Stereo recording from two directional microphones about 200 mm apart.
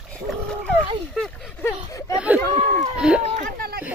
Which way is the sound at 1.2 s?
Centre (ahead or behind).